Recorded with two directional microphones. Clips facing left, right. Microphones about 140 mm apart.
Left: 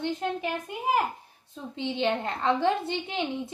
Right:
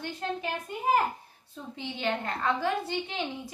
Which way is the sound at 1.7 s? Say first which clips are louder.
Left 5 dB; 20° left (ahead or behind).